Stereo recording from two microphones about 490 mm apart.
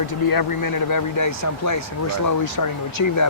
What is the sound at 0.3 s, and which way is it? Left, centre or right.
Speech, left.